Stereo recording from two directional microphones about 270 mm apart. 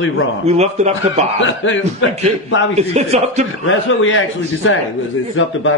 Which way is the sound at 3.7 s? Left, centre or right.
Left.